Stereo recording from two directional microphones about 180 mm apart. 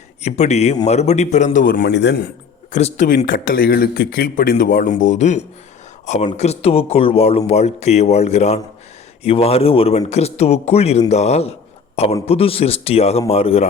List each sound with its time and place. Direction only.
0.2 s speech: 40° left (ahead or behind); by 2.2 s 75° left (ahead or behind)
2.7 s speech: 40° left (ahead or behind)